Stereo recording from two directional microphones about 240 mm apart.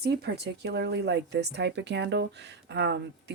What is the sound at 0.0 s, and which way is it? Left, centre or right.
Speech, right.